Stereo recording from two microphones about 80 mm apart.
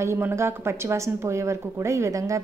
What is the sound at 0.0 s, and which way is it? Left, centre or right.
Speech, right.